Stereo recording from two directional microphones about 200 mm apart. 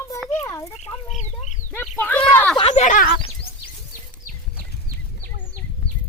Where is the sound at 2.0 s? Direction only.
5° left (ahead or behind).